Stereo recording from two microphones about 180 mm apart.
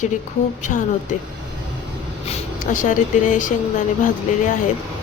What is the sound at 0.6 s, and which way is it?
Speech, 45° left (ahead or behind).